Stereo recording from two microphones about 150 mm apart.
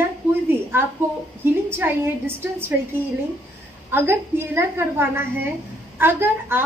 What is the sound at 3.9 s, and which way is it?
A woman's voice, 15° right (ahead or behind).